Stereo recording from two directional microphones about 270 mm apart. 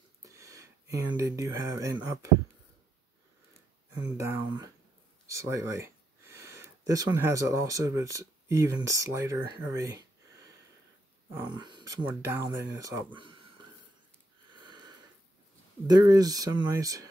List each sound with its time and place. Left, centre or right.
0.2 s speech: centre
3.9 s speech: centre
11.2 s speech: centre
14.7 s sniff: centre
15.9 s speech: centre